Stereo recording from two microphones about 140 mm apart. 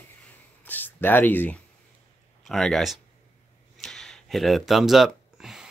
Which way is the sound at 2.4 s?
Centre (ahead or behind).